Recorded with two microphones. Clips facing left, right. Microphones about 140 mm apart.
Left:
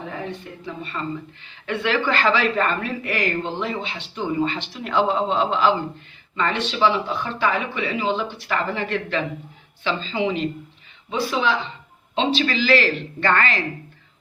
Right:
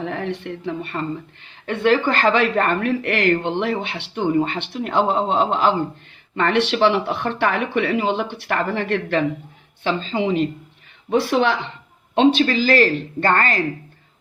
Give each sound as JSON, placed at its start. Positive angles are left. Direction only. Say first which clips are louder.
{"t": 0.0, "sound": "a woman's voice", "louder": "right 5 dB", "side_deg": -75}
{"t": 1.5, "sound": "speech", "louder": "right 7 dB", "side_deg": -50}
{"t": 6.3, "sound": "speech", "louder": "right 5 dB", "side_deg": -65}
{"t": 11.1, "sound": "speech", "louder": "right 4 dB", "side_deg": -60}